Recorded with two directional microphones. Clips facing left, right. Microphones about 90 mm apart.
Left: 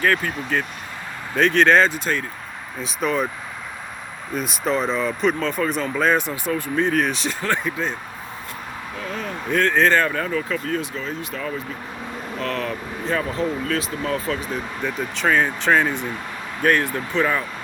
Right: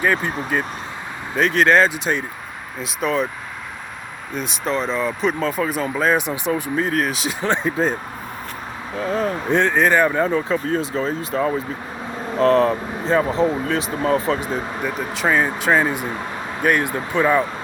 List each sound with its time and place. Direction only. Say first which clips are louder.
0.0 s speech: right 1 dB; 15° right (ahead or behind)
1.4 s speech: even; 5° right (ahead or behind)
1.9 s speech: right 2 dB; 15° right (ahead or behind)
2.8 s speech: right 1 dB; centre (ahead or behind)
4.4 s speech: even; 5° left (ahead or behind)
6.1 s speech: right 2 dB; 20° right (ahead or behind)
6.7 s speech: even; 5° right (ahead or behind)
7.4 s speech: right 3 dB; 20° right (ahead or behind)
9.0 s speech: right 9 dB; 35° right (ahead or behind)
9.6 s speech: right 1 dB; 15° right (ahead or behind); by 14.4 s 30° right (ahead or behind)
14.8 s speech: even; 5° right (ahead or behind)